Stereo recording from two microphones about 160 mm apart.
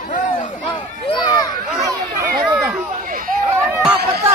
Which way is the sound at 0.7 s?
30° left (ahead or behind).